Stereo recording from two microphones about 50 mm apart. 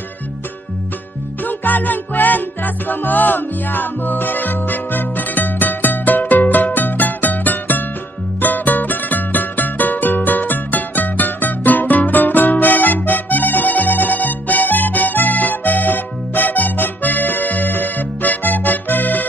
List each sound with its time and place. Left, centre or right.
1.4 s music: left